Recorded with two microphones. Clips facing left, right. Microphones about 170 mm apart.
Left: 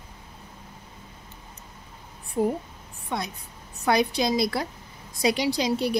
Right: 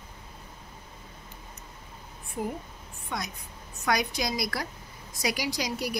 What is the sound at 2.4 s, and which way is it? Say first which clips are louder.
A woman's voice: left 8 dB; 35° left (ahead or behind).